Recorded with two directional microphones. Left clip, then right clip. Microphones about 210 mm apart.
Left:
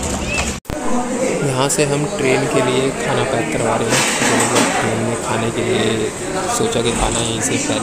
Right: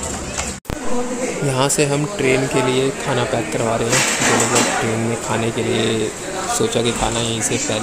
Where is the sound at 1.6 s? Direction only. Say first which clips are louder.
Right 1 dB; centre (ahead or behind).